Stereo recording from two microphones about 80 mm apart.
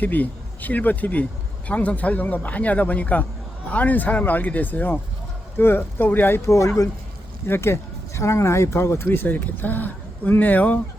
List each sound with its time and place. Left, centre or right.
0.0 s speech: left
6.4 s speech: left